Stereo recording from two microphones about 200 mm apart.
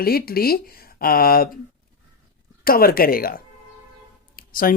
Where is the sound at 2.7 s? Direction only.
45° left (ahead or behind).